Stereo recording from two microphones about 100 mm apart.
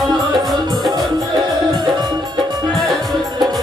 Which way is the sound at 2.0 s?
45° right (ahead or behind).